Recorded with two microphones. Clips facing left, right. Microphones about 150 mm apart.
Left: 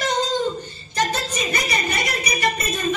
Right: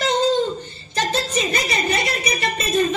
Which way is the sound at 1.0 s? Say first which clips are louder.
Right 2 dB; 25° right (ahead or behind).